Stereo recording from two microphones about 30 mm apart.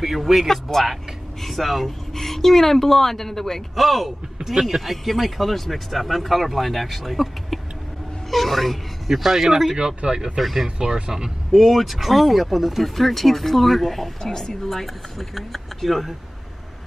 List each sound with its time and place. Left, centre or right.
0.5 s speech: centre
3.7 s speech: centre
4.5 s speech: centre
9.7 s speech: right
10.4 s speech: centre
11.0 s speech: right
11.5 s speech: centre
14.3 s speech: centre
14.7 s speech: centre